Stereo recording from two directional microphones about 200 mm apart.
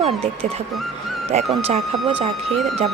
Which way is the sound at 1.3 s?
30° right (ahead or behind).